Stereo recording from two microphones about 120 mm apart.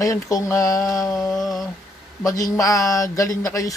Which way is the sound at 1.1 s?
Centre (ahead or behind).